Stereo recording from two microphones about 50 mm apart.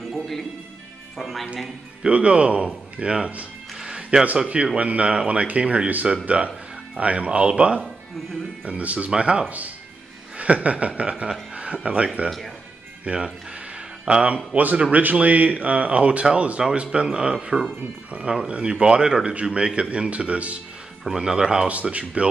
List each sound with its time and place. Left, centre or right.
0.1 s music: centre
1.1 s speech: centre
2.0 s speech: right
3.7 s music: centre
4.4 s speech: right
9.1 s speech: centre
12.3 s speech: centre
13.0 s speech: right
18.1 s speech: right
18.5 s speech: centre
21.0 s speech: centre
21.6 s speech: right